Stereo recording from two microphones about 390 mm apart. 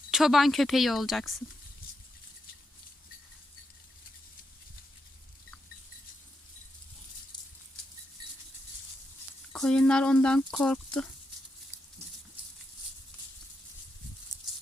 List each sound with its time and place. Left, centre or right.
0.1 s speech: centre
9.5 s speech: centre